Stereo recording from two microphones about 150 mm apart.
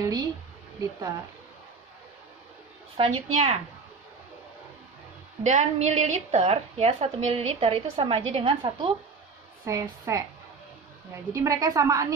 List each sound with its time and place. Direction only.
0.0 s speech: 25° right (ahead or behind)
3.0 s a woman's voice: 45° right (ahead or behind)
5.4 s a woman's voice: 50° right (ahead or behind)
9.7 s a woman's voice: 20° right (ahead or behind)
11.3 s a woman's voice: 20° right (ahead or behind)